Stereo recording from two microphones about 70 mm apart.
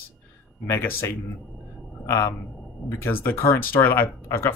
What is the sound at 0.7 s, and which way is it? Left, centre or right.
Speech, left.